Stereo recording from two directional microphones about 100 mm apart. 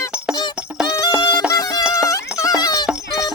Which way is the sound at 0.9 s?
40° left (ahead or behind).